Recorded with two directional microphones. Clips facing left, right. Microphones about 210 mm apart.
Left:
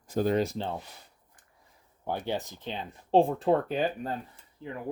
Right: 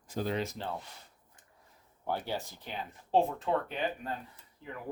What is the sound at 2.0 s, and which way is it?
Speech, 20° left (ahead or behind).